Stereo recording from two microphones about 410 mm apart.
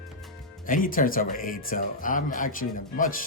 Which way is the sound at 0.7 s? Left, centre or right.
Centre.